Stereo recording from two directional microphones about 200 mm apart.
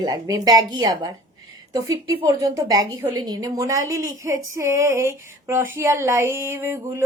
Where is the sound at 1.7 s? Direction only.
15° right (ahead or behind).